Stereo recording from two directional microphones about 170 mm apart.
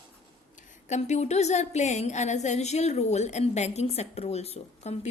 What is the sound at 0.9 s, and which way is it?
A woman's voice, 45° left (ahead or behind).